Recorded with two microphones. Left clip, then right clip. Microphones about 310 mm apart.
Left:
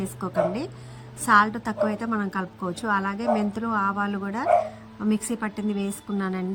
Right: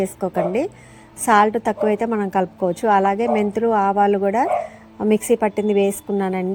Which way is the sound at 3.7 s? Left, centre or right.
Right.